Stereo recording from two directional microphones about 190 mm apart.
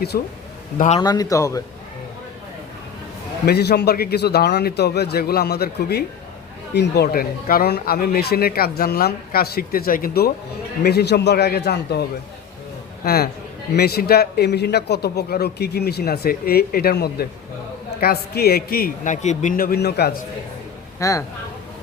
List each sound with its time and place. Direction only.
0.1 s speech: 50° left (ahead or behind)
0.9 s speech: 20° left (ahead or behind)
3.4 s a man's voice: 60° left (ahead or behind)
13.7 s a man's voice: 55° left (ahead or behind)
21.0 s speech: 15° left (ahead or behind)